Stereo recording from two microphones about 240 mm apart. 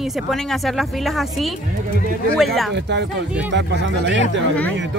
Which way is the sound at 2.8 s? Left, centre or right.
Right.